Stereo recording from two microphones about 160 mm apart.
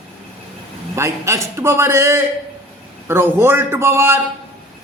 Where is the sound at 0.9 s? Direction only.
20° right (ahead or behind).